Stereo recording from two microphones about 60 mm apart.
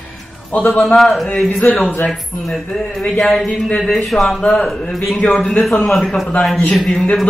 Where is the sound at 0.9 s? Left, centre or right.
Centre.